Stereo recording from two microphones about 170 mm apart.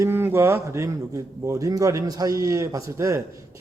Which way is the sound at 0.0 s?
15° right (ahead or behind).